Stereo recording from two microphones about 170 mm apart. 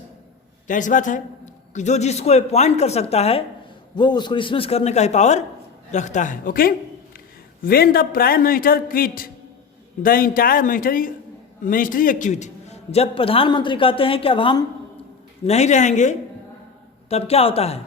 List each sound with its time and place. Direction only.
0.7 s a man's voice: 50° left (ahead or behind)
3.9 s a man's voice: 25° left (ahead or behind)
15.4 s a man's voice: 40° left (ahead or behind)